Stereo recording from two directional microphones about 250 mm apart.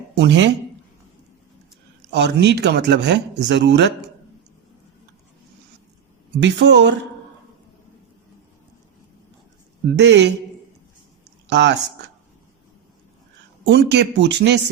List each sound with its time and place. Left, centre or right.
0.2 s speech: right
2.1 s speech: right
6.3 s speech: right
9.9 s speech: right
11.4 s speech: right
13.7 s speech: right